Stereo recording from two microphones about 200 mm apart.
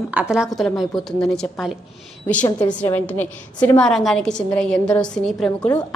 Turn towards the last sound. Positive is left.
turn(degrees=5)  # may be behind; listen again after turning